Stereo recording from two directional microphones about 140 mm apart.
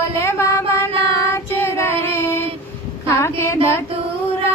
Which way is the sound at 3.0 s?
20° left (ahead or behind).